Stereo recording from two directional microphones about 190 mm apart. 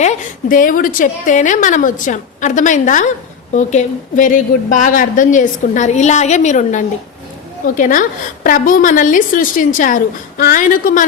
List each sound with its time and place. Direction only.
0.0 s a woman's voice: 40° left (ahead or behind)